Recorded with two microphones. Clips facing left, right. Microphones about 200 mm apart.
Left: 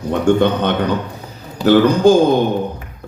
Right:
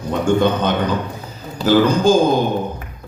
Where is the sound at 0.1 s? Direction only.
65° left (ahead or behind).